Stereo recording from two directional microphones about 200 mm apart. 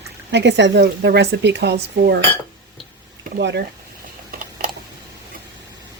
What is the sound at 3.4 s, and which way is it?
Speech, 60° right (ahead or behind).